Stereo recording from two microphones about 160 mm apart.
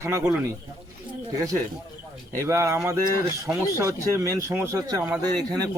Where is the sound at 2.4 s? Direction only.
15° right (ahead or behind).